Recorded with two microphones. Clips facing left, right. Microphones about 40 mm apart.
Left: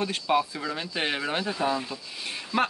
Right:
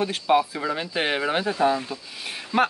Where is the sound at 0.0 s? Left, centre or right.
Centre.